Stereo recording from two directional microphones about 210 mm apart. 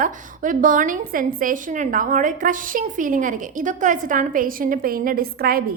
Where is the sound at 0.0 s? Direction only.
40° right (ahead or behind).